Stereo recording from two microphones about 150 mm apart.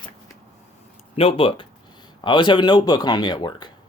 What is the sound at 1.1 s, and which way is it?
Speech, 40° left (ahead or behind).